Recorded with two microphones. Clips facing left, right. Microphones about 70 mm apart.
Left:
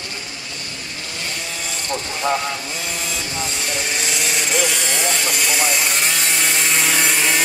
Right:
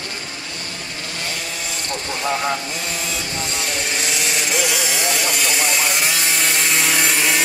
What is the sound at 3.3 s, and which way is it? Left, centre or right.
Speech, centre.